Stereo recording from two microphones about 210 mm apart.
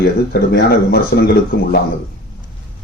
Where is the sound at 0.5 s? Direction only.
50° left (ahead or behind).